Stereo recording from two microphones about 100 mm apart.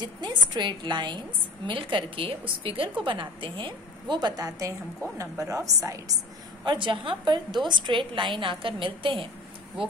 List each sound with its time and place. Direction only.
0.0 s a woman's voice: 45° right (ahead or behind)
6.6 s a woman's voice: 55° right (ahead or behind)